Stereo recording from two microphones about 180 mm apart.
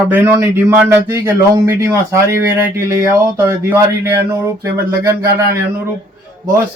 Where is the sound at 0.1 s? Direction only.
15° right (ahead or behind).